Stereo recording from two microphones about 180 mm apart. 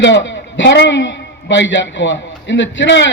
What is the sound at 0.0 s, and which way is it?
A man's voice, 85° left.